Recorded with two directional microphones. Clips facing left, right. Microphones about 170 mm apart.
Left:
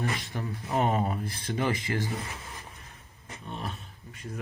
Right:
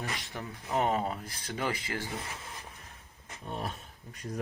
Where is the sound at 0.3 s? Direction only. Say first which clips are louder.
Left 1 dB; 15° left (ahead or behind).